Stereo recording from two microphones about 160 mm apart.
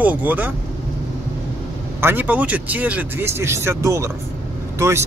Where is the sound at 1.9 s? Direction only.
10° right (ahead or behind).